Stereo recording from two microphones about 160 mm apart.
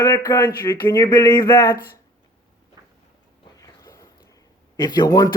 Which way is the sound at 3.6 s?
20° left (ahead or behind).